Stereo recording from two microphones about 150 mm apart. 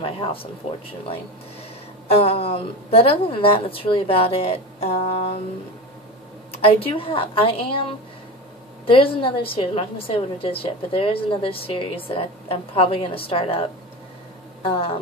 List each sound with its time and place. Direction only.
0.0 s a woman's voice: 35° left (ahead or behind)
2.1 s a woman's voice: 40° left (ahead or behind)
6.5 s a woman's voice: 40° left (ahead or behind)
8.8 s a woman's voice: 35° left (ahead or behind)